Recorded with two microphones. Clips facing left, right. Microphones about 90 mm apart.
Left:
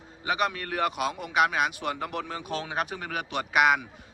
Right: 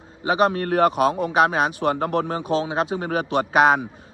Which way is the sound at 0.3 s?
35° right (ahead or behind).